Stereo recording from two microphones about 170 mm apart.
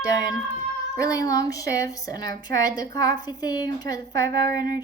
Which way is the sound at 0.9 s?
20° left (ahead or behind).